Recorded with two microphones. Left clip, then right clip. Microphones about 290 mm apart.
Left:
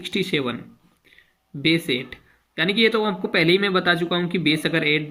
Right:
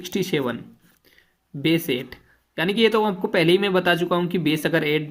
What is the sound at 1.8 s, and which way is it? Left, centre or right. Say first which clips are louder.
Speech: left 1 dB; right.